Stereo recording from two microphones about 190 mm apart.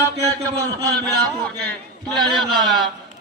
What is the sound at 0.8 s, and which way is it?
Speech, 20° right (ahead or behind).